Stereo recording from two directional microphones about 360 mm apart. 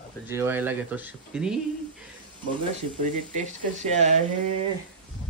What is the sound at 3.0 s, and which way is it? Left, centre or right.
Speech, centre.